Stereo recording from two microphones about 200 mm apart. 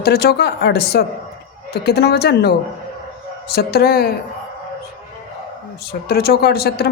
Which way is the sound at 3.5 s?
50° left (ahead or behind).